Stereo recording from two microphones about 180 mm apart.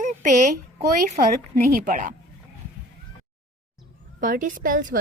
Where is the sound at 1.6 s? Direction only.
55° right (ahead or behind).